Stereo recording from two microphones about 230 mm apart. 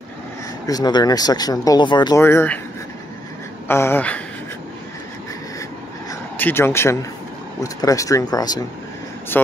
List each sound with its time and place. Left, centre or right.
0.7 s speech: centre
3.6 s speech: centre
6.3 s speech: centre